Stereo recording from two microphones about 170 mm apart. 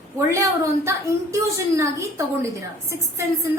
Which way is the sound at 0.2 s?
15° right (ahead or behind).